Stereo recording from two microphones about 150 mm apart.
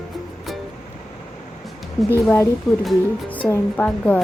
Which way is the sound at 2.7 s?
Centre (ahead or behind).